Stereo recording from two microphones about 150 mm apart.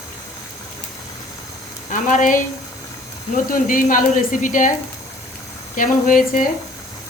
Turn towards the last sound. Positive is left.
turn(degrees=65)  # may be behind; listen again after turning